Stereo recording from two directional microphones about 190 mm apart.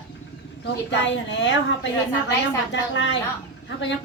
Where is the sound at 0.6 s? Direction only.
75° left (ahead or behind).